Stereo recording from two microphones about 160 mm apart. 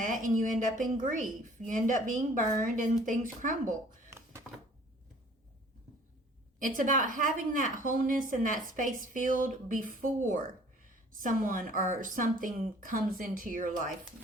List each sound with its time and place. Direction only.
0.0 s a woman's voice: 55° right (ahead or behind)
4.1 s a sound: 15° right (ahead or behind)
6.6 s a woman's voice: 55° right (ahead or behind)